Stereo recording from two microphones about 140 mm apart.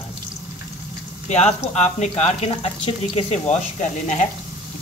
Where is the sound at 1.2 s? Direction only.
50° left (ahead or behind).